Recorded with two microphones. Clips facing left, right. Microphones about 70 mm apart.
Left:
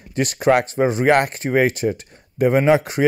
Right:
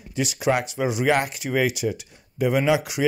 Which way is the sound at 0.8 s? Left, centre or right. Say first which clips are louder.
Left 5 dB; left.